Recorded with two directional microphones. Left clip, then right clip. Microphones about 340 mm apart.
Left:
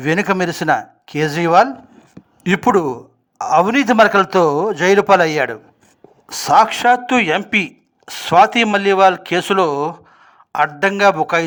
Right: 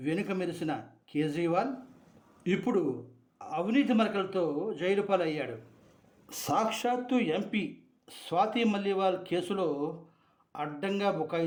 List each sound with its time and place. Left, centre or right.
0.0 s speech: left